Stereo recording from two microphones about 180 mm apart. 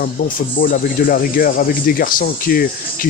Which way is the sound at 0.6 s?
50° left (ahead or behind).